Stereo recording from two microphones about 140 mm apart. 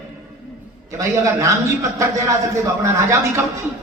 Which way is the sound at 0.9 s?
20° right (ahead or behind).